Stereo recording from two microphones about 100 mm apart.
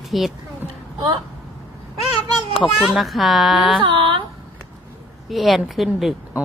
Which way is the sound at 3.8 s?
60° right (ahead or behind).